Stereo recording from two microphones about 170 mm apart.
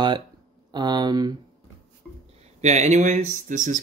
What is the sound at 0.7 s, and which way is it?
Speech, 25° right (ahead or behind).